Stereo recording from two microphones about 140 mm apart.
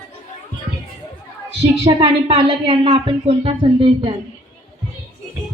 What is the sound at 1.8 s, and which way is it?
Speech, 40° right (ahead or behind).